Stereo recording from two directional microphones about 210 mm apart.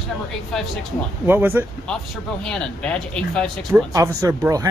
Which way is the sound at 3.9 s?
15° right (ahead or behind).